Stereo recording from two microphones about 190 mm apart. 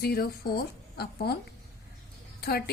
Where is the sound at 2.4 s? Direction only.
55° left (ahead or behind).